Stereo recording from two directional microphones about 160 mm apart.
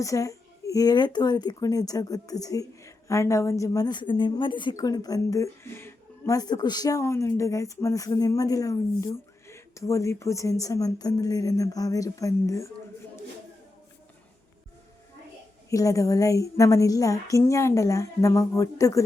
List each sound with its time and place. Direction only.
0.0 s a woman's voice: 20° left (ahead or behind)
15.7 s a woman's voice: 20° left (ahead or behind)